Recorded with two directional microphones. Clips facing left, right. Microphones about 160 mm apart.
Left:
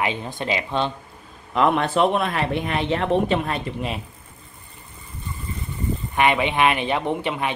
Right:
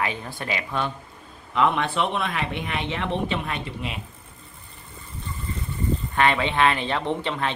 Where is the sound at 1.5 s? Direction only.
40° left (ahead or behind).